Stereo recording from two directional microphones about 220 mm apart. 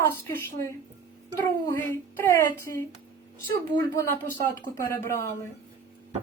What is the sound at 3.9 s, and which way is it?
A woman's voice, 10° left (ahead or behind).